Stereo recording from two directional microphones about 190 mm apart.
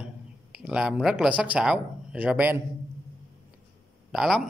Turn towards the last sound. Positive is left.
turn(degrees=-5)  # may be behind; listen again after turning